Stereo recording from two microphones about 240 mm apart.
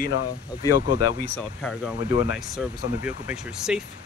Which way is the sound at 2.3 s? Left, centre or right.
Centre.